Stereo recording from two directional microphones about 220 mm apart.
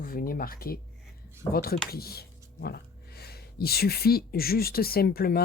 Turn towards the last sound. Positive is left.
turn(degrees=45)  # may be behind; listen again after turning